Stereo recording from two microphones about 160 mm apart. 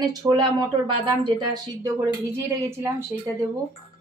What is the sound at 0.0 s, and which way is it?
Speech, 25° right (ahead or behind).